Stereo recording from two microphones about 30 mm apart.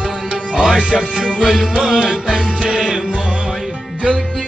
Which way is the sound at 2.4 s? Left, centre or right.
Right.